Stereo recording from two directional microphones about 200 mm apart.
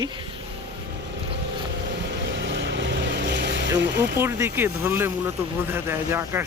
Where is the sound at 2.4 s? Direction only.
60° right (ahead or behind).